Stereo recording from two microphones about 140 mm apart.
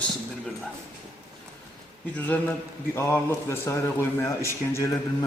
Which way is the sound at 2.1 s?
10° left (ahead or behind).